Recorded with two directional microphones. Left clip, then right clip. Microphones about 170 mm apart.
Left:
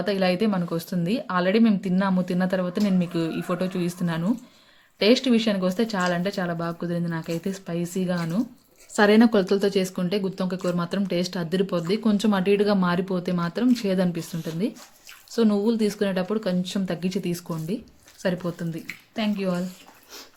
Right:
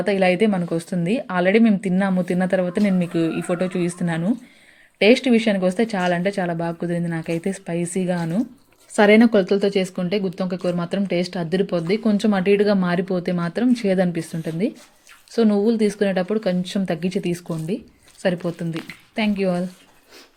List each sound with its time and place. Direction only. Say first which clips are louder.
0.0 s speech: right 5 dB; 10° right (ahead or behind)
19.1 s speech: right 5 dB; 20° right (ahead or behind)